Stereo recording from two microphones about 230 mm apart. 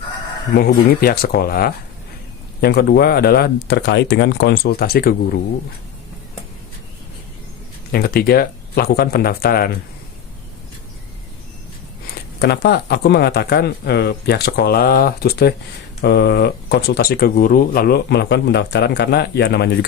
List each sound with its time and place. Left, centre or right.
0.5 s speech: left
7.9 s speech: left
12.4 s speech: left